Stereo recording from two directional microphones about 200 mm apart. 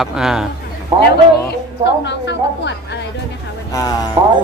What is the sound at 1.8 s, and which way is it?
A woman's voice, 60° left (ahead or behind).